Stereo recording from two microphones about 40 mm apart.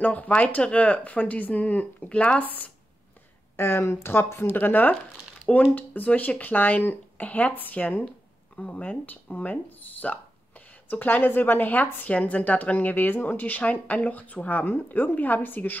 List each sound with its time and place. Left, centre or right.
0.0 s speech: left
2.4 s speech: left
3.5 s speech: left
4.6 s speech: left
7.2 s speech: left
8.5 s speech: left
9.0 s speech: left
12.1 s speech: left